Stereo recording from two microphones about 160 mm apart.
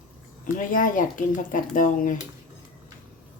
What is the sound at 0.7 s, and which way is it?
Speech, 60° left (ahead or behind).